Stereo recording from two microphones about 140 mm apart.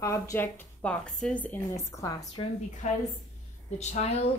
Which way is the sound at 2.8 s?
55° left (ahead or behind).